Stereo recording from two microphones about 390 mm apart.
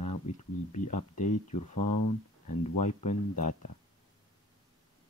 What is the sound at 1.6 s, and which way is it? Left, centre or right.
Speech, left.